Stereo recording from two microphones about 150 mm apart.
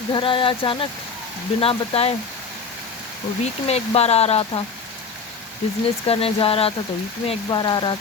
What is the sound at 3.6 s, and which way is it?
Speech, 40° left (ahead or behind).